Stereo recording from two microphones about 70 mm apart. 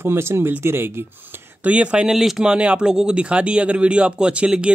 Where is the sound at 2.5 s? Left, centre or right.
Centre.